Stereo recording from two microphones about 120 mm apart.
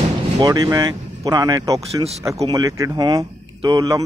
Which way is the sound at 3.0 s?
35° right (ahead or behind).